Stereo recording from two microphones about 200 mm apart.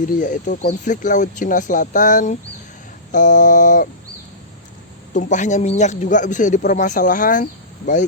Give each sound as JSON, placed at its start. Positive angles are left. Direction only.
{"t": 0.1, "sound": "speech", "side_deg": 40}
{"t": 5.1, "sound": "speech", "side_deg": 40}